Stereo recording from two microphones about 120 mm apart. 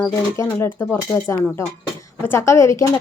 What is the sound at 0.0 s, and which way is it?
A woman's voice, 25° left (ahead or behind).